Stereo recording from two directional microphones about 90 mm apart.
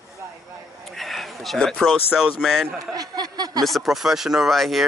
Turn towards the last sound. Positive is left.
turn(degrees=0)  # may be behind; listen again after turning